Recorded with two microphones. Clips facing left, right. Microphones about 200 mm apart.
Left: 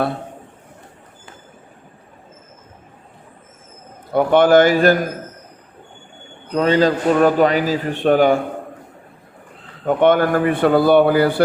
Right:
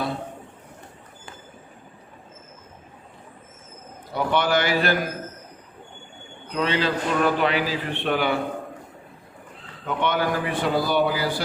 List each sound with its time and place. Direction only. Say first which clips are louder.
4.1 s a man's voice: left 10 dB; 50° left (ahead or behind)
6.5 s a man's voice: left 8 dB; 45° left (ahead or behind)
9.8 s a man's voice: left 10 dB; 50° left (ahead or behind)